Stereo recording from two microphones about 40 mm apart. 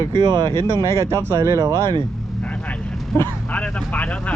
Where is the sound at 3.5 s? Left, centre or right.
Left.